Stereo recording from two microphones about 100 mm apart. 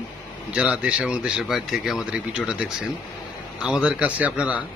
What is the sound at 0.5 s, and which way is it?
A man's voice, 15° right (ahead or behind).